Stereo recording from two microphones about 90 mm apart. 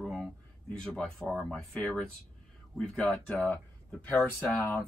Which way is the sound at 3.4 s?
15° left (ahead or behind).